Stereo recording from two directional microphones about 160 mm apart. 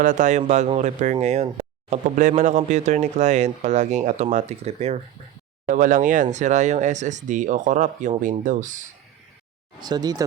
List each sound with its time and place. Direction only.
0.0 s speech: 55° right (ahead or behind)
5.6 s speech: 55° right (ahead or behind)
9.8 s speech: 25° right (ahead or behind)